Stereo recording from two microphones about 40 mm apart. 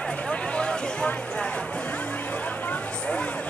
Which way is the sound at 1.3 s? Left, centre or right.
Left.